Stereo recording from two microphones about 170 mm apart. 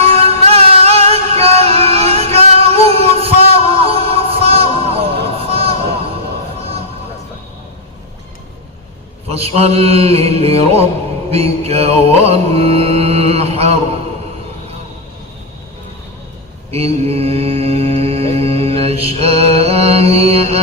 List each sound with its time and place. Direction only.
0.0 s music: 35° right (ahead or behind)
9.3 s music: 35° right (ahead or behind)
16.7 s mantra: 35° right (ahead or behind)